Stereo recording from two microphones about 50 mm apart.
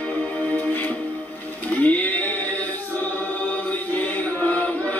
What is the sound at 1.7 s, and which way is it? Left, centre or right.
Music, left.